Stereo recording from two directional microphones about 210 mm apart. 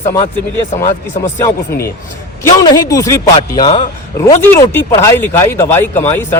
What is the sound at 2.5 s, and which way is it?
A man's voice, 15° left (ahead or behind).